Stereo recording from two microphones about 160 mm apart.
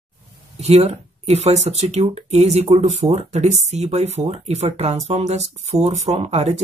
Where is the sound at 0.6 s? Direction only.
40° right (ahead or behind).